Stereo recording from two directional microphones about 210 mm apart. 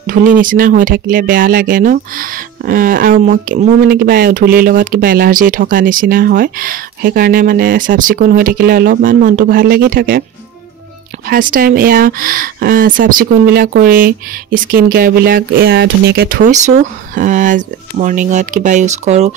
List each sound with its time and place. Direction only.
0.0 s speech: 40° right (ahead or behind)
11.2 s speech: 40° right (ahead or behind)